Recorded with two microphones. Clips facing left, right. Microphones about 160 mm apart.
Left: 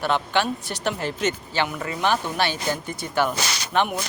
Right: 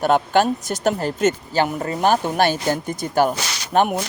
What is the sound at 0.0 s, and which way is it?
Speech, 45° right (ahead or behind).